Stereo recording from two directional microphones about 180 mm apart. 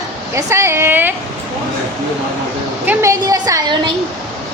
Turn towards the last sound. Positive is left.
turn(degrees=-20)  # may be behind; listen again after turning